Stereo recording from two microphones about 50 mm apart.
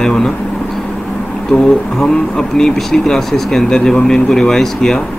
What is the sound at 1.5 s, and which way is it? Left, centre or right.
Speech, centre.